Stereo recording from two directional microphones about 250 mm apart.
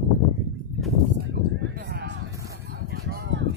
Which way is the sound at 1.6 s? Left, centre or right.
Right.